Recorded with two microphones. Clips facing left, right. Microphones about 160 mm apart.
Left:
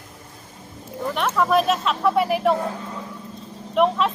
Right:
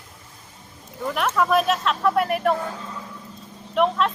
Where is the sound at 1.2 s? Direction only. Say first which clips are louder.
Left 1 dB; centre (ahead or behind).